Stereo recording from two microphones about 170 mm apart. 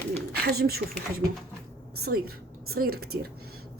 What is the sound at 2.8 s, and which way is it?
Speech, 60° right (ahead or behind).